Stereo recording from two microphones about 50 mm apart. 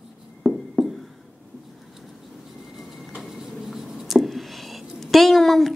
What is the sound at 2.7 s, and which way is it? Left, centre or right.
Writing, centre.